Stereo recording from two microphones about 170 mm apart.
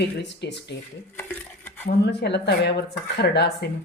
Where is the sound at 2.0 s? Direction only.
80° left.